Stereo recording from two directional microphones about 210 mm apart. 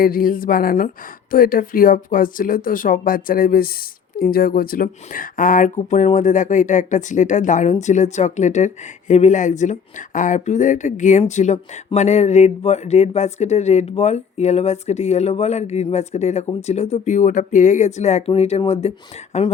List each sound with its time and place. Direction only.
0.0 s a woman's voice: 45° left (ahead or behind)